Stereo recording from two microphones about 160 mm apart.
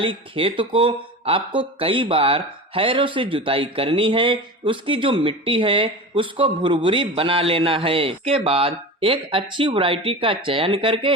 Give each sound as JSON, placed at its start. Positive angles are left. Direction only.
{"t": 0.0, "sound": "speech", "side_deg": -35}